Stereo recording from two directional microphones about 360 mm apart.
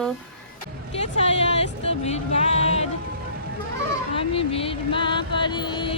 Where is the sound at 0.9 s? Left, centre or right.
Centre.